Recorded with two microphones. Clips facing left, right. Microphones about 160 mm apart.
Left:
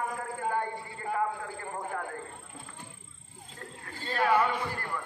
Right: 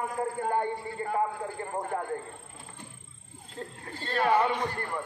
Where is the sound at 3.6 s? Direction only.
30° right (ahead or behind).